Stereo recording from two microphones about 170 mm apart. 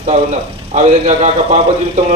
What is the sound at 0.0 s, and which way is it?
A man's voice, 45° right (ahead or behind).